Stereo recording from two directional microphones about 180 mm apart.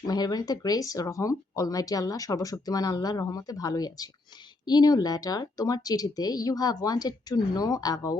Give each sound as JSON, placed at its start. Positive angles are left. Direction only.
{"t": 0.1, "sound": "speech", "side_deg": 20}